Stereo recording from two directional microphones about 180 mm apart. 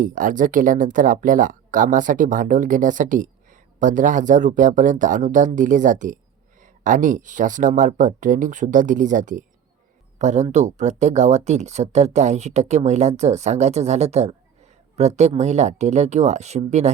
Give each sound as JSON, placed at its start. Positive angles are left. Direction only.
{"t": 0.0, "sound": "speech", "side_deg": -45}